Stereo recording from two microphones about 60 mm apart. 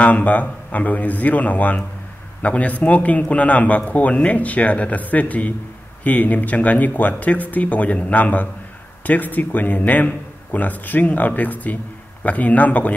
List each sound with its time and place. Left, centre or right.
0.0 s a man's voice: left